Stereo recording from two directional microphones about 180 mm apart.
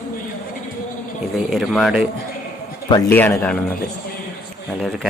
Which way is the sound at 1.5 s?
Centre (ahead or behind).